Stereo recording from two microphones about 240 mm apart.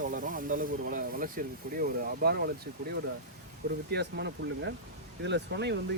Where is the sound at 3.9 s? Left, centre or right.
Right.